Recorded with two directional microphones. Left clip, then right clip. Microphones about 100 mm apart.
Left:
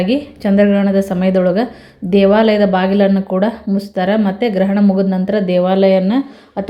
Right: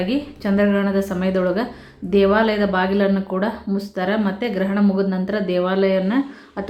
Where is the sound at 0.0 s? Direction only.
45° left (ahead or behind).